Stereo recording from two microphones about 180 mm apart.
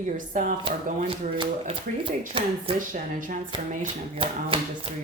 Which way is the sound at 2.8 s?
45° right (ahead or behind).